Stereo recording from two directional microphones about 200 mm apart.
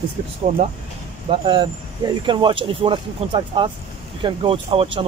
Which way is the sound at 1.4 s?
25° right (ahead or behind).